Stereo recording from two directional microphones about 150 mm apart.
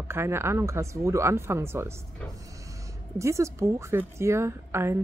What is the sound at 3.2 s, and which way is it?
A woman's voice, 20° right (ahead or behind).